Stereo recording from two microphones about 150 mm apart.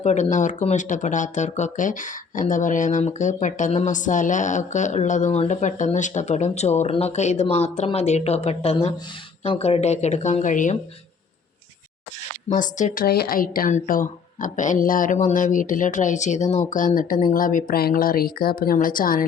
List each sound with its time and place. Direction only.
0.0 s speech: 50° left (ahead or behind)
12.5 s speech: 55° left (ahead or behind)
13.1 s speech: 85° left; by 19.2 s 70° left (ahead or behind)